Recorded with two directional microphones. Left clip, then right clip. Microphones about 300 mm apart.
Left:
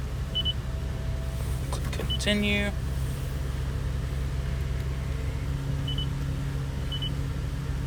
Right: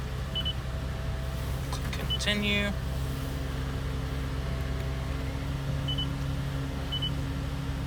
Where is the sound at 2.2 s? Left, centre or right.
Centre.